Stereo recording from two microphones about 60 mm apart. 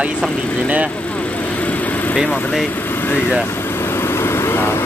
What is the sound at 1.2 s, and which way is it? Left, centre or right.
Vehicle, left.